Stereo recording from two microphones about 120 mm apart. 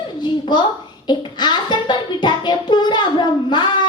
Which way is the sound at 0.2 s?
40° left (ahead or behind).